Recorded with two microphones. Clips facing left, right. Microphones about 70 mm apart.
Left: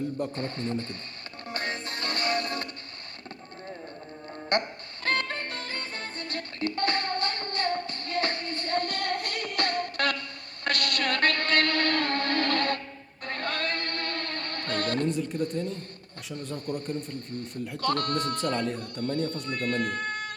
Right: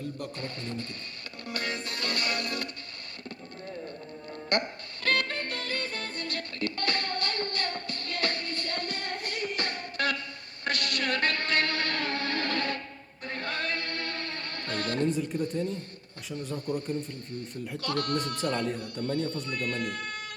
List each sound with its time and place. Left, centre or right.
0.2 s speech: left
1.5 s music: left
4.3 s music: left
8.8 s music: left
15.1 s speech: centre
16.8 s speech: left
18.4 s speech: centre
19.5 s speech: left